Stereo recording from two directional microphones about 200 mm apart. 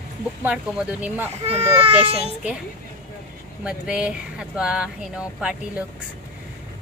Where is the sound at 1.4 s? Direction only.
30° right (ahead or behind).